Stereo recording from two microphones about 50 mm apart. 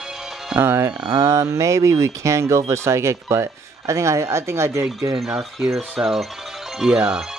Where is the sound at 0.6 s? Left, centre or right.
Right.